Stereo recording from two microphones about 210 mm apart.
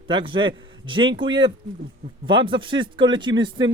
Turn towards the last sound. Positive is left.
turn(degrees=-20)  # may be behind; listen again after turning